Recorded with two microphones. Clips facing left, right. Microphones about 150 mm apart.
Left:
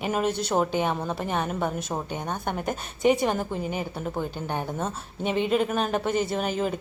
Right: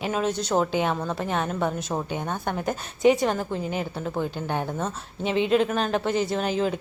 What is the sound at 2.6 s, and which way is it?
A woman's voice, centre (ahead or behind).